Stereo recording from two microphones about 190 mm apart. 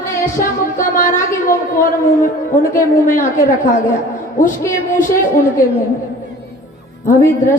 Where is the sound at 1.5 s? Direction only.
45° left (ahead or behind).